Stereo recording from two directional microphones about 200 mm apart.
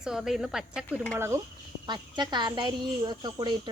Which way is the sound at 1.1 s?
15° right (ahead or behind).